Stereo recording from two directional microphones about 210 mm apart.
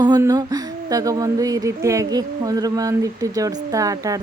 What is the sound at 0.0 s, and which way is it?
Speech, 15° right (ahead or behind).